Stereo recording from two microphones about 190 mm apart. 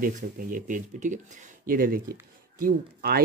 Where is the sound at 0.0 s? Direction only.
45° right (ahead or behind).